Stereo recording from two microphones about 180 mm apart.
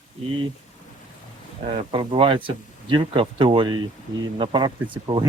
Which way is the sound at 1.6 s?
30° right (ahead or behind).